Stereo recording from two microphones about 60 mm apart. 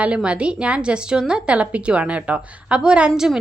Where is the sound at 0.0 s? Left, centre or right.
Centre.